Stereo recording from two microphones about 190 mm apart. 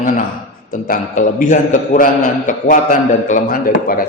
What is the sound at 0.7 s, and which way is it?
A man's voice, 45° left (ahead or behind).